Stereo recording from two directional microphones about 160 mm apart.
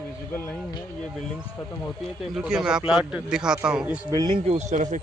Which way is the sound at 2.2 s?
5° right (ahead or behind).